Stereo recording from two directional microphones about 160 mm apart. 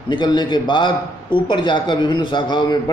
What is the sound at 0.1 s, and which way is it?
A man's voice, 30° left (ahead or behind).